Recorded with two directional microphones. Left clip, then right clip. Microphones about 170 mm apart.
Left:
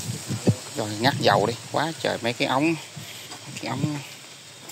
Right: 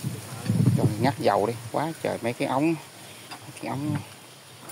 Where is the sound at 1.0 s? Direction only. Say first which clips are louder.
Left 4 dB; 5° right (ahead or behind).